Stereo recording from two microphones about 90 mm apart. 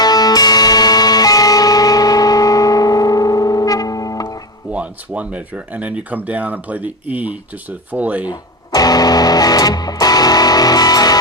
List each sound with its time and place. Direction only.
0.0 s music: 45° left (ahead or behind)
4.7 s speech: 15° right (ahead or behind)
8.3 s speech: 45° left (ahead or behind)